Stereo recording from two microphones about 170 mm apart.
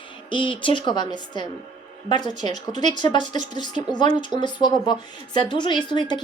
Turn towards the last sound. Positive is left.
turn(degrees=25)  # may be behind; listen again after turning